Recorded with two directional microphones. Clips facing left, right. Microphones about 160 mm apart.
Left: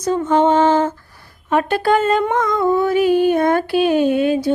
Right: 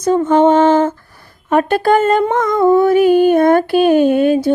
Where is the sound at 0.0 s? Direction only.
50° right (ahead or behind).